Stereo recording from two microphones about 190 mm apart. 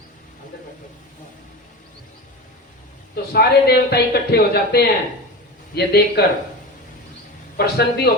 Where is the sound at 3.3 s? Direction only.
55° left (ahead or behind).